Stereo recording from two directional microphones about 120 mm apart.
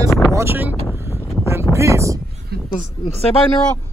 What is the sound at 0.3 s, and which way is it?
Speech, 20° right (ahead or behind).